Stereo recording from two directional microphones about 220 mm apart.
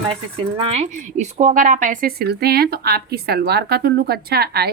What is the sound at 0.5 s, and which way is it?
Speech, 25° right (ahead or behind).